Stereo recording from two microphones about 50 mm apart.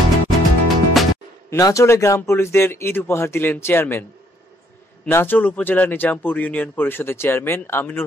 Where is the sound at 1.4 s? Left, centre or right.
Left.